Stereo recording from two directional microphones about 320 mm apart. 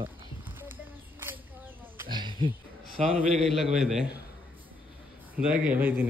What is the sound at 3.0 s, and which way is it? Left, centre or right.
A man's voice, centre.